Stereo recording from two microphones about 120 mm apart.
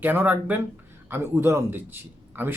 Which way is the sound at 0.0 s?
15° right (ahead or behind).